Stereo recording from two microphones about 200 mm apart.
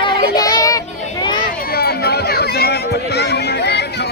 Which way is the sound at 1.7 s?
50° left (ahead or behind).